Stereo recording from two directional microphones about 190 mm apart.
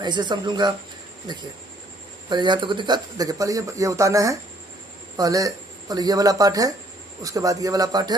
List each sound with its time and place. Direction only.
0.0 s speech: 25° right (ahead or behind)
2.3 s speech: 25° right (ahead or behind)